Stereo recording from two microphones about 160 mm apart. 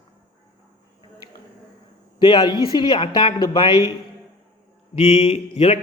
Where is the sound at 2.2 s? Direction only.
30° left (ahead or behind).